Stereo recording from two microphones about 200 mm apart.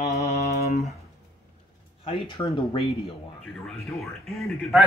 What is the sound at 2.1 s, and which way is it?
Speech, 25° left (ahead or behind).